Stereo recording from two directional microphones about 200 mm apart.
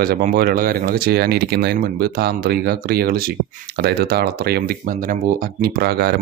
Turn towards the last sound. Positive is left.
turn(degrees=-50)  # may be behind; listen again after turning